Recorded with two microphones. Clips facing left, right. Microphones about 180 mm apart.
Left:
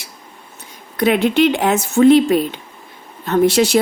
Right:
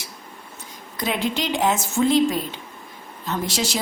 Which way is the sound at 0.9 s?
65° left (ahead or behind).